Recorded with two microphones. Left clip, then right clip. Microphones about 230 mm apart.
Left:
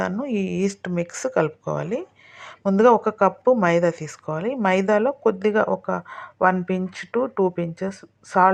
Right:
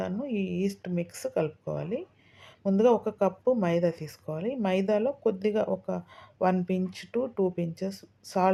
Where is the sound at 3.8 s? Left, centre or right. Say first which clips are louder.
Left 7 dB; centre.